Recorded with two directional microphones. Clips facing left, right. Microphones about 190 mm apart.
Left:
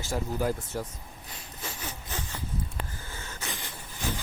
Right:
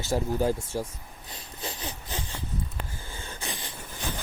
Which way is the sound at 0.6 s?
10° right (ahead or behind).